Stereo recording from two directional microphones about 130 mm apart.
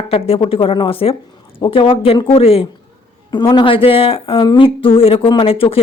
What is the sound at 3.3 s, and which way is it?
Speech, 35° left (ahead or behind).